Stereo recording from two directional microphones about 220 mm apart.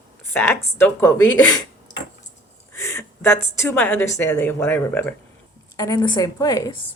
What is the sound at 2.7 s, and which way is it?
A woman's voice, 10° left (ahead or behind).